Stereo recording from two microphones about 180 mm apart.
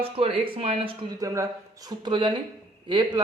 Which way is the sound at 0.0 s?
30° right (ahead or behind).